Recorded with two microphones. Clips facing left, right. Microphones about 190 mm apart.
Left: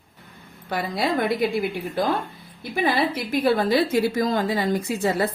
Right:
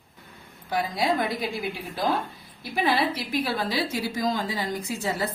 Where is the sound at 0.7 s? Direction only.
65° left (ahead or behind).